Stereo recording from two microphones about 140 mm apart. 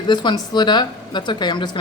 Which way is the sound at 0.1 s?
30° left (ahead or behind).